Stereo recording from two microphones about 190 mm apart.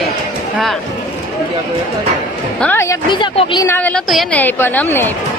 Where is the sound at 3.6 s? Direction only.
10° left (ahead or behind).